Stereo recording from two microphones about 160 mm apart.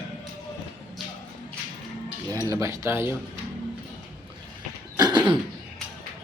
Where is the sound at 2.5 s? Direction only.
20° right (ahead or behind).